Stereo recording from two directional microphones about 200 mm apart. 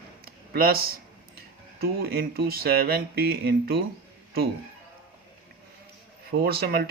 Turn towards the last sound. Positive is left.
turn(degrees=-50)  # may be behind; listen again after turning